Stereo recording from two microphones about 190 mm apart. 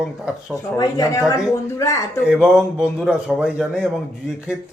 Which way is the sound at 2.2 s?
5° right (ahead or behind).